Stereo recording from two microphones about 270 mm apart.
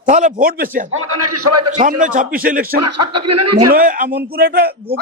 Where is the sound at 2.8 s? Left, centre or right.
Right.